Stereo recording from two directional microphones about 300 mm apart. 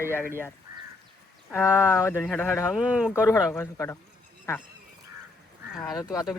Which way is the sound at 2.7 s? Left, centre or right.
Centre.